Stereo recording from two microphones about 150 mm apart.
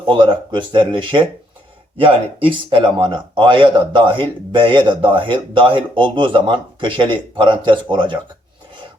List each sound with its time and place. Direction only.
0.0 s speech: 35° right (ahead or behind)